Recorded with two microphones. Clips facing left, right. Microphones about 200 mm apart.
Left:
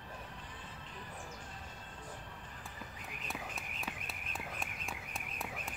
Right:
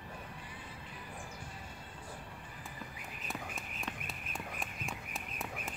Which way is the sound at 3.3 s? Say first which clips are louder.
Right 2 dB; centre (ahead or behind).